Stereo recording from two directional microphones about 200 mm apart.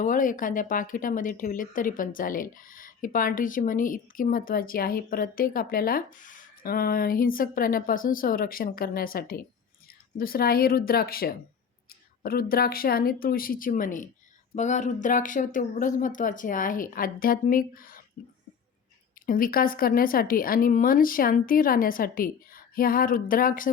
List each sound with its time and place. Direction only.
0.0 s speech: 40° left (ahead or behind)
19.2 s speech: 45° left (ahead or behind)